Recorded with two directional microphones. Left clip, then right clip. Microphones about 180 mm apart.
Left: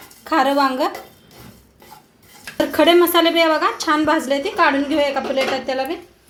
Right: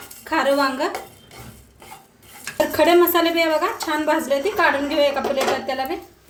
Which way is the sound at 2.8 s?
30° left (ahead or behind).